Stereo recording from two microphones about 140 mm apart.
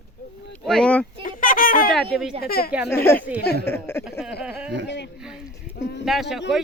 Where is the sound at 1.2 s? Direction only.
80° left.